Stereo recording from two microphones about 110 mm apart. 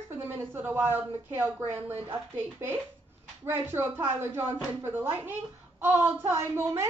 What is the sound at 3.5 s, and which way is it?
A woman's voice, 20° right (ahead or behind).